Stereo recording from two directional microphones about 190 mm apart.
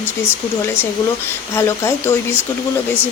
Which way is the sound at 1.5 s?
15° left (ahead or behind).